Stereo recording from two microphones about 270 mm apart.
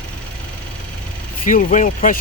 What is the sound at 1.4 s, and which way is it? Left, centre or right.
Speech, left.